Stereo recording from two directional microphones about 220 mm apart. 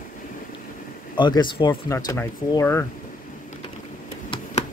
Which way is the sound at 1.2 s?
20° left (ahead or behind).